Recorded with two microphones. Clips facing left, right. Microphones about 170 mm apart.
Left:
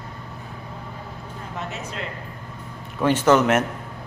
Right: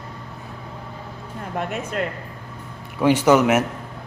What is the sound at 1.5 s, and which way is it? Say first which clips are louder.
Speech: right 7 dB; 55° right (ahead or behind).